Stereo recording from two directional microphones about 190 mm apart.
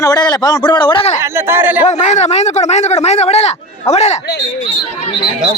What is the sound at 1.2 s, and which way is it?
Speech, 15° right (ahead or behind).